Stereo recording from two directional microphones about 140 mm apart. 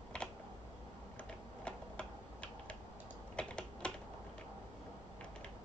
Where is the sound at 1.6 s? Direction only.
10° left (ahead or behind).